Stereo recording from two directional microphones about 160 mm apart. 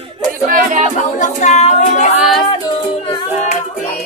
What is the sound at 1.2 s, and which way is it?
Speech, 50° left (ahead or behind).